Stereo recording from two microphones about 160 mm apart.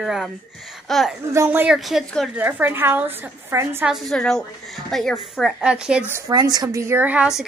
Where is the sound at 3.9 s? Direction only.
5° left (ahead or behind).